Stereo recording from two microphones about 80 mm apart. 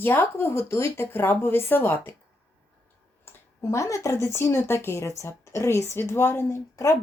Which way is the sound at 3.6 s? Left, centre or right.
Left.